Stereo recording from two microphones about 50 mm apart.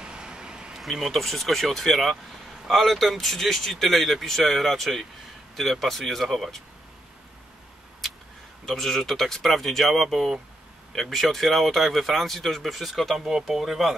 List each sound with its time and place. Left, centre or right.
0.0 s a sound: centre
0.7 s speech: centre
8.6 s speech: centre